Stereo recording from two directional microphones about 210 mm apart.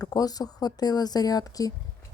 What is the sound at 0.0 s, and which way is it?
A woman's voice, 20° left (ahead or behind).